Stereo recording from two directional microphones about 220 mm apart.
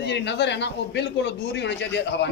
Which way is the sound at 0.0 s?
50° left (ahead or behind).